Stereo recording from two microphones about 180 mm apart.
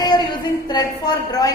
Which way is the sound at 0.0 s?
25° left (ahead or behind).